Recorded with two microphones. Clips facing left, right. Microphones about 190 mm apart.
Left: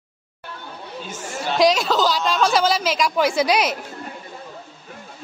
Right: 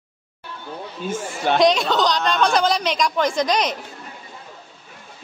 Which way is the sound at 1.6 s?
Centre (ahead or behind).